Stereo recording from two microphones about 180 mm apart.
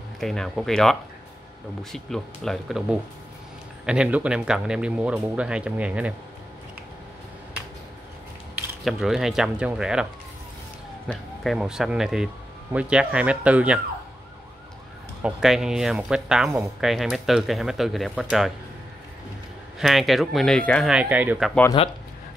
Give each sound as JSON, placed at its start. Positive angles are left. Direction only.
{"t": 0.2, "sound": "speech", "side_deg": 0}
{"t": 8.8, "sound": "speech", "side_deg": 0}
{"t": 11.1, "sound": "speech", "side_deg": 0}
{"t": 15.2, "sound": "speech", "side_deg": -5}
{"t": 19.8, "sound": "speech", "side_deg": 0}
{"t": 20.9, "sound": "speech", "side_deg": -5}
{"t": 21.8, "sound": "speech", "side_deg": 30}